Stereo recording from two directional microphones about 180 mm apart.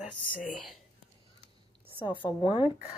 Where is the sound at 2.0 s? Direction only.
10° right (ahead or behind).